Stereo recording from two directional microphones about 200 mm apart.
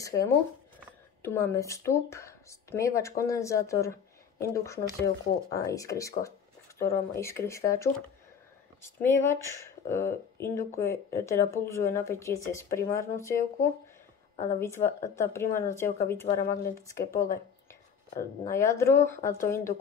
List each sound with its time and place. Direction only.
1.2 s speech: 10° left (ahead or behind)
14.6 s speech: 15° left (ahead or behind)